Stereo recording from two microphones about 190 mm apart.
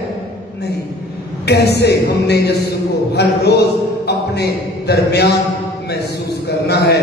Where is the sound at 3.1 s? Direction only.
60° left (ahead or behind).